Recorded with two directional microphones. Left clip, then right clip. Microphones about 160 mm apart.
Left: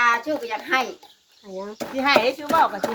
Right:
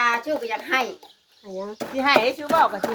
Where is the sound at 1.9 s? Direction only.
25° right (ahead or behind).